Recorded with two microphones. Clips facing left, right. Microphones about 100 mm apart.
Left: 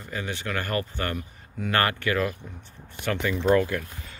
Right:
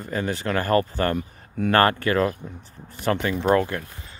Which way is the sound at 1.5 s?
50° right (ahead or behind).